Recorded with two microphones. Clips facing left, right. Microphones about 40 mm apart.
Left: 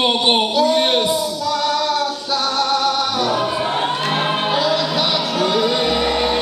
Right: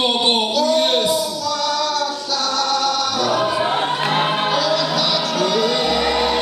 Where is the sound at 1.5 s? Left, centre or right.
Left.